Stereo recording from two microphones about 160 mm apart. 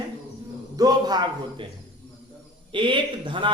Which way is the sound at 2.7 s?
30° right (ahead or behind).